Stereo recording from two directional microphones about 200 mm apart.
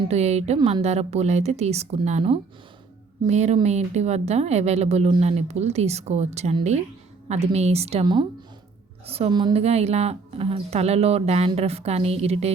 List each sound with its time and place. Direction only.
0.1 s speech: 35° right (ahead or behind)